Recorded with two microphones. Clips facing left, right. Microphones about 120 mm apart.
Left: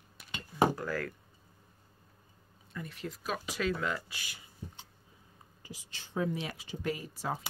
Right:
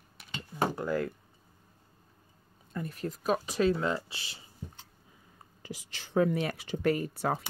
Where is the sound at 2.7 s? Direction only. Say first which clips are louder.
Right 5 dB; 40° right (ahead or behind).